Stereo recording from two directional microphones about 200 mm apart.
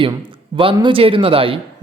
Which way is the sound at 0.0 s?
25° right (ahead or behind).